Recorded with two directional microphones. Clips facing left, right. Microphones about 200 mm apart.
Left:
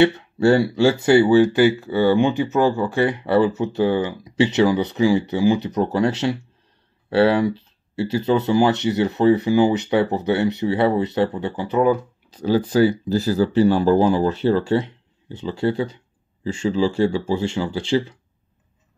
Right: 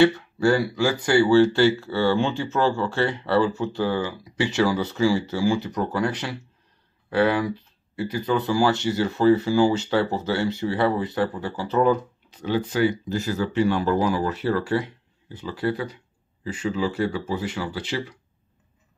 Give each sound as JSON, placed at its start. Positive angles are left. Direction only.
{"t": 0.0, "sound": "speech", "side_deg": 25}
{"t": 12.3, "sound": "speech", "side_deg": 35}